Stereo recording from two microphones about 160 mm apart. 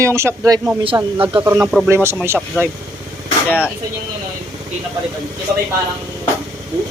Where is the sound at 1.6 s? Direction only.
Centre (ahead or behind).